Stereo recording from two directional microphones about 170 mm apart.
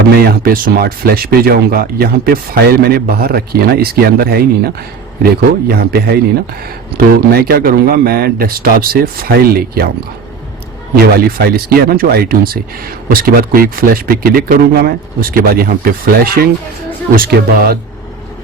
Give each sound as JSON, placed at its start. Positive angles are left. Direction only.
{"t": 0.2, "sound": "speech", "side_deg": -60}
{"t": 10.9, "sound": "speech", "side_deg": -65}
{"t": 13.5, "sound": "speech", "side_deg": -60}